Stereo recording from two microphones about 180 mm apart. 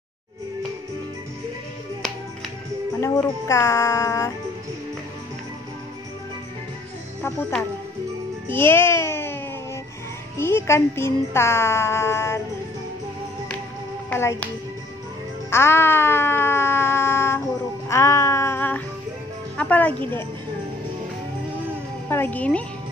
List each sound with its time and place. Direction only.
3.0 s speech: 15° left (ahead or behind)
8.5 s a child's voice: 10° left (ahead or behind)
10.4 s speech: 15° left (ahead or behind)
14.1 s speech: 10° left (ahead or behind)
15.5 s a sound: 15° left (ahead or behind)
17.8 s music: 15° left (ahead or behind)
22.1 s speech: 10° left (ahead or behind)